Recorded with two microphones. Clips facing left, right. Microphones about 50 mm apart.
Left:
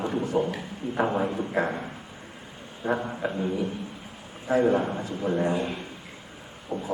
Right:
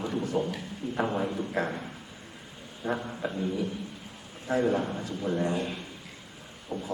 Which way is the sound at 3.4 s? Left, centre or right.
Left.